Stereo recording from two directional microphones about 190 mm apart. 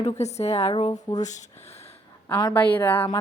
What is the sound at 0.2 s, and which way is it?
A woman's voice, 35° left (ahead or behind).